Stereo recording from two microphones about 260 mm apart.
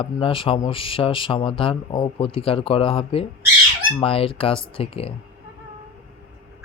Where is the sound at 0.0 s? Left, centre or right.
Centre.